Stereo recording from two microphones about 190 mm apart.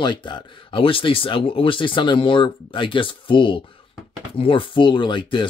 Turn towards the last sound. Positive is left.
turn(degrees=25)  # may be behind; listen again after turning